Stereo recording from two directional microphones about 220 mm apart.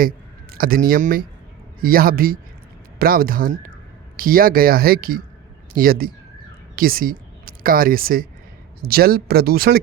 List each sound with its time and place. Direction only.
0.5 s speech: 40° right (ahead or behind)